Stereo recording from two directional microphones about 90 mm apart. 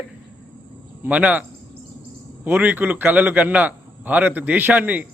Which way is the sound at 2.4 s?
20° right (ahead or behind).